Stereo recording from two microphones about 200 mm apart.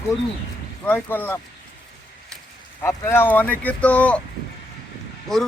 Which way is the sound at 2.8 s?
10° left (ahead or behind).